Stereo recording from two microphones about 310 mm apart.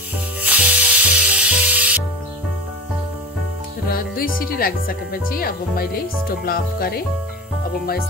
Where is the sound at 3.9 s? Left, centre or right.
Left.